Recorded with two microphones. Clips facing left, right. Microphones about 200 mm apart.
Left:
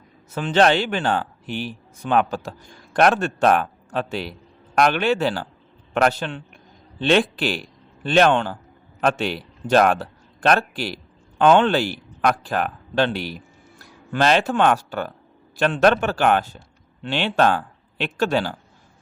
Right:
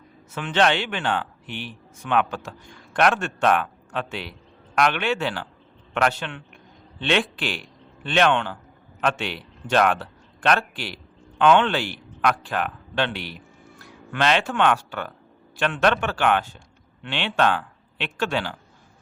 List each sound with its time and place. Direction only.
0.3 s a man's voice: 40° left (ahead or behind)